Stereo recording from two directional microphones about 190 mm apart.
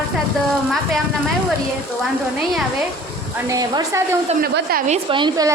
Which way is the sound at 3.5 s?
20° right (ahead or behind).